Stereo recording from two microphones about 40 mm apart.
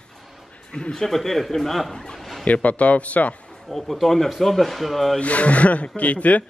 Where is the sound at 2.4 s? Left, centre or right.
Left.